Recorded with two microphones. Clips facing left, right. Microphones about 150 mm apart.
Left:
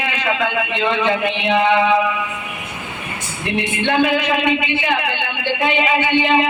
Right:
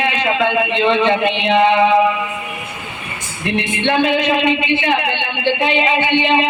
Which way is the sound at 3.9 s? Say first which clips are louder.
Right 2 dB; 25° right (ahead or behind).